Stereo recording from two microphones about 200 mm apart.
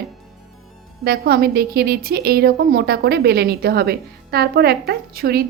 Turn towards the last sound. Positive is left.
turn(degrees=-50)  # may be behind; listen again after turning